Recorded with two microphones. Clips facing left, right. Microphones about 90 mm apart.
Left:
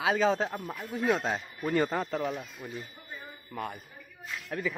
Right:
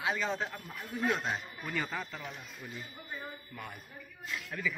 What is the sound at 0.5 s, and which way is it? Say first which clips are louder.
Speech: left 6 dB; 50° left (ahead or behind).